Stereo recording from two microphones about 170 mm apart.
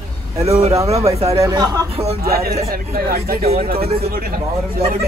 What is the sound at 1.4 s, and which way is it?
Speech, 25° right (ahead or behind).